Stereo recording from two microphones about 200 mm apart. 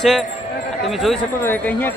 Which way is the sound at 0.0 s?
Centre (ahead or behind).